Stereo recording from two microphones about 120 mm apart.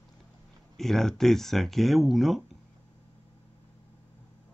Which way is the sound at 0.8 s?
5° left (ahead or behind).